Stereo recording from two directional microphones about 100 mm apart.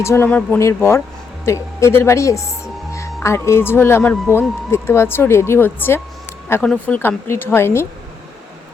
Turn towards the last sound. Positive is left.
turn(degrees=25)  # may be behind; listen again after turning